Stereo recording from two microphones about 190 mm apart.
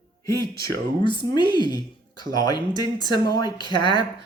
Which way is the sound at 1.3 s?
25° left (ahead or behind).